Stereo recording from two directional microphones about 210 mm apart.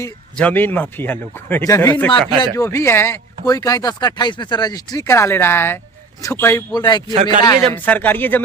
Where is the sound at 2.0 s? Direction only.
5° left (ahead or behind); by 7.0 s 20° left (ahead or behind).